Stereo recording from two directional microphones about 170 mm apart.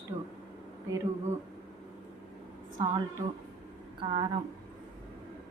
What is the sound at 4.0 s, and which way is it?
Speech, 30° right (ahead or behind).